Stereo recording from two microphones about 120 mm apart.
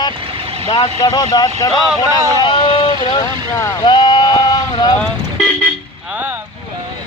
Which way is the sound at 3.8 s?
35° left (ahead or behind).